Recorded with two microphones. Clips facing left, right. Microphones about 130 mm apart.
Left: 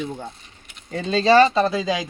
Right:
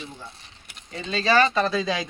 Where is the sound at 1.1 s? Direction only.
30° left (ahead or behind).